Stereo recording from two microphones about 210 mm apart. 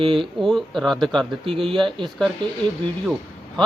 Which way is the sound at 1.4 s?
25° right (ahead or behind).